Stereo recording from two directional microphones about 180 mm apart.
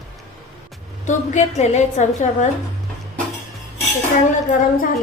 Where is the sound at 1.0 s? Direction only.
40° left (ahead or behind).